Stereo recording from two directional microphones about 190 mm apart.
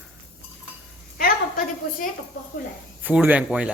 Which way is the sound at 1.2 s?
50° left (ahead or behind).